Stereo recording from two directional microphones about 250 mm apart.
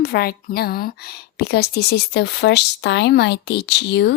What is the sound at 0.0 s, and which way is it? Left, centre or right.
Speech, left.